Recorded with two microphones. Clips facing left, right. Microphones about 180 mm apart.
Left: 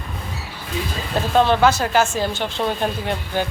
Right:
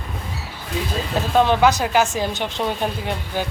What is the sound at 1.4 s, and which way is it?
Speech, 15° right (ahead or behind).